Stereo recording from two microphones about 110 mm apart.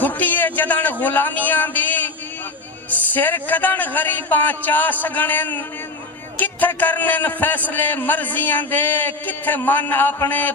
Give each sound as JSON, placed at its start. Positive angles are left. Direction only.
{"t": 0.0, "sound": "a man's voice", "side_deg": 15}